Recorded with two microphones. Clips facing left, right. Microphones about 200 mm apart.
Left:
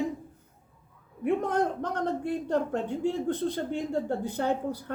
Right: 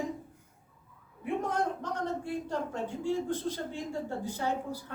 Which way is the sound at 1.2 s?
60° left (ahead or behind).